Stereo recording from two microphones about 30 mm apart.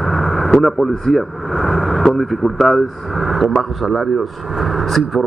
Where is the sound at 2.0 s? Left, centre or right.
Centre.